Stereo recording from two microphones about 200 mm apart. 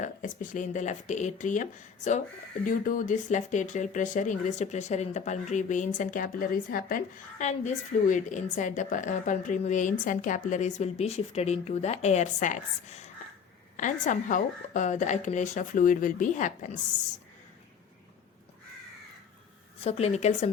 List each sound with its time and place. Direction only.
0.0 s speech: 40° left (ahead or behind)
2.6 s speech: 40° left (ahead or behind)
19.8 s speech: 30° left (ahead or behind)